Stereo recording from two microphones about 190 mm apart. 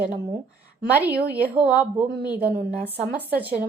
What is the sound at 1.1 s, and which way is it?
Speech, 55° right (ahead or behind).